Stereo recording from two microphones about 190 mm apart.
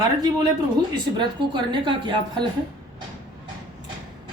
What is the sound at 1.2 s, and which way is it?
Speech, 25° right (ahead or behind).